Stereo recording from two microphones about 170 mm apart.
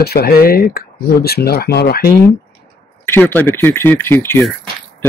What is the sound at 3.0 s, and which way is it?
Speech, 10° left (ahead or behind).